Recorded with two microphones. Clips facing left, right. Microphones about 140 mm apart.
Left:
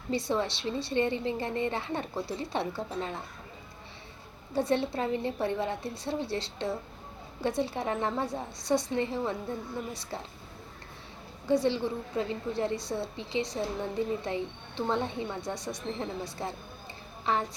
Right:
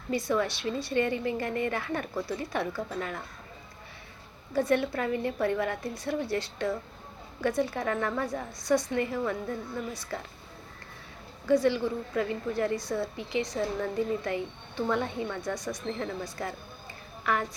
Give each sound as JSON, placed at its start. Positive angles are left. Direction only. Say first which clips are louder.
{"t": 0.1, "sound": "a woman's voice", "louder": "right 1 dB", "side_deg": 30}
{"t": 4.5, "sound": "a woman's voice", "louder": "right 2 dB", "side_deg": 30}
{"t": 11.4, "sound": "a woman's voice", "louder": "right 2 dB", "side_deg": 25}